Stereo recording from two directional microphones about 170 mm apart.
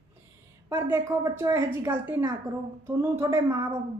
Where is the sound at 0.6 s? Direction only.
15° right (ahead or behind).